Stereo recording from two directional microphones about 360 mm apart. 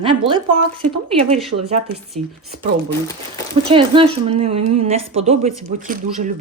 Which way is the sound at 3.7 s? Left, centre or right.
Centre.